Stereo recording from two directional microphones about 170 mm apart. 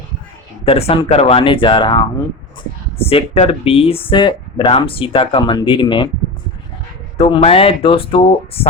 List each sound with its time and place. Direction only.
0.6 s speech: 35° left (ahead or behind)
7.2 s speech: 35° left (ahead or behind)